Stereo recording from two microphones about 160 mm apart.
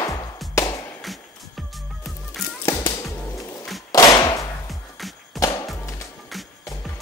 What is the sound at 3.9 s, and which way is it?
Whip, 20° left (ahead or behind).